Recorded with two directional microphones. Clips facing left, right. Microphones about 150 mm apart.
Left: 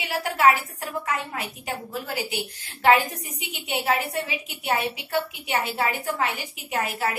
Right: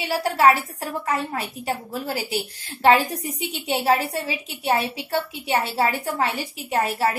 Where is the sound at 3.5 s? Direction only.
35° right (ahead or behind).